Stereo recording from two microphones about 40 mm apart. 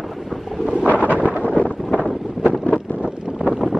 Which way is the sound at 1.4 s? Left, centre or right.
Left.